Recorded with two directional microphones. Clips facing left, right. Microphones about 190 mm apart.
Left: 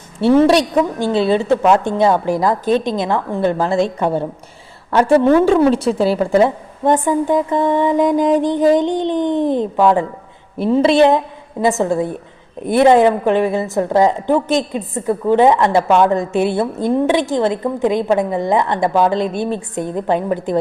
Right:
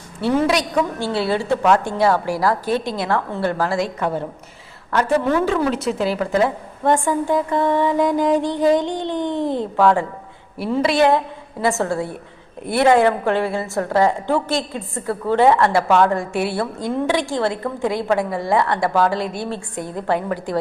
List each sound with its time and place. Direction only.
0.2 s a woman's voice: 30° left (ahead or behind)
0.9 s a woman's voice: 20° left (ahead or behind)
6.8 s a woman's voice: 20° left (ahead or behind)